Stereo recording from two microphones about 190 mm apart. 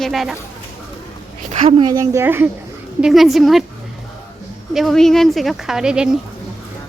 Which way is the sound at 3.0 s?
Centre (ahead or behind).